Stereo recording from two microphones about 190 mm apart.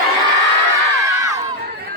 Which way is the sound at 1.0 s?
15° right (ahead or behind).